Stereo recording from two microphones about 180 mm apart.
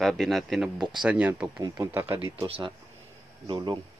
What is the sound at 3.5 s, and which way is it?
Speech, 20° right (ahead or behind).